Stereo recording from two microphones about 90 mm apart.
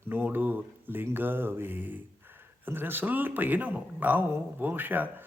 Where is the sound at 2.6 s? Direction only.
25° right (ahead or behind).